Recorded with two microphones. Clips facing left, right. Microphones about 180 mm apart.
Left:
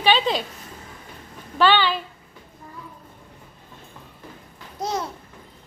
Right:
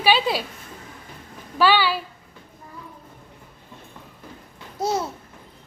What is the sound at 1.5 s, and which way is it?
Speech, 10° right (ahead or behind).